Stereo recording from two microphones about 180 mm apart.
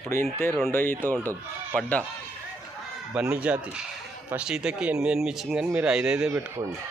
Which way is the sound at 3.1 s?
10° right (ahead or behind).